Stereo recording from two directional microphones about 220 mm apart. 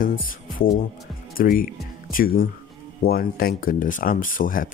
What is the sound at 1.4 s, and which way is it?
Speech, 40° left (ahead or behind).